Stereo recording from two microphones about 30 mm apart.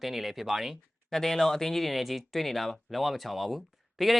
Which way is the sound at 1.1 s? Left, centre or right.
Centre.